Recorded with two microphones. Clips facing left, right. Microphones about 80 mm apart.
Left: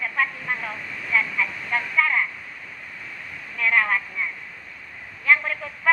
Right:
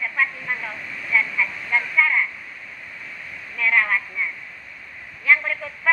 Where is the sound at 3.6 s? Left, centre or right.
Left.